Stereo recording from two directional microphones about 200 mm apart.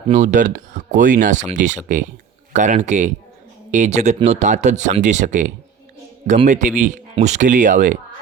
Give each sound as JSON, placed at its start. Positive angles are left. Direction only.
{"t": 0.1, "sound": "speech", "side_deg": -40}